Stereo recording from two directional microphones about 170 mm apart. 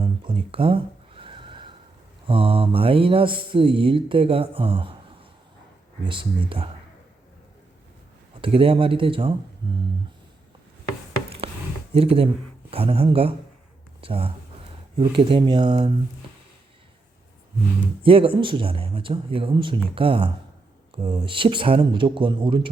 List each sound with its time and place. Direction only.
0.0 s a sound: 30° right (ahead or behind)
2.2 s speech: 30° right (ahead or behind)
6.1 s speech: 30° right (ahead or behind)
8.4 s speech: 30° right (ahead or behind)
11.4 s a sound: 35° right (ahead or behind)
11.9 s speech: 35° right (ahead or behind)
18.0 s speech: 30° right (ahead or behind)